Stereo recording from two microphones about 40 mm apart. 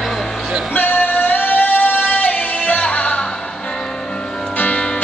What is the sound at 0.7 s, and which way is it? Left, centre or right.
Music, left.